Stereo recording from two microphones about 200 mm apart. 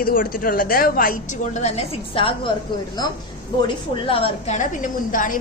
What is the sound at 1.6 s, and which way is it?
Speech, 30° left (ahead or behind).